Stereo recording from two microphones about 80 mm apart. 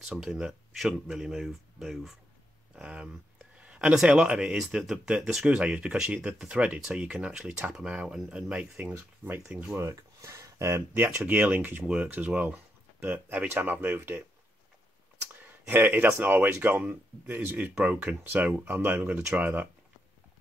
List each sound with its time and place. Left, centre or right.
0.1 s speech: centre
8.9 s speech: right
9.5 s speech: centre
9.8 s speech: right
11.0 s speech: right
15.6 s speech: right